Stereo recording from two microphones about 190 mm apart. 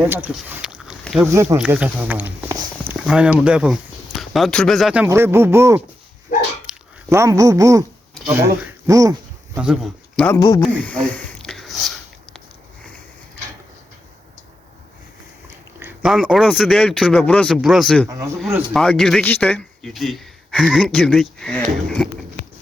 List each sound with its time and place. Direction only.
0.0 s speech: 10° right (ahead or behind)
1.3 s speech: 15° right (ahead or behind)
5.0 s speech: 15° right (ahead or behind)
6.3 s dog: 45° left (ahead or behind)
6.7 s speech: 15° right (ahead or behind)
9.6 s speech: centre (ahead or behind)
11.1 s a sound: 5° left (ahead or behind)
15.8 s speech: 5° right (ahead or behind)